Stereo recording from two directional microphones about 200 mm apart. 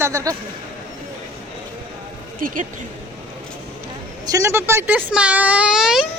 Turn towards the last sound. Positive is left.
turn(degrees=-5)  # may be behind; listen again after turning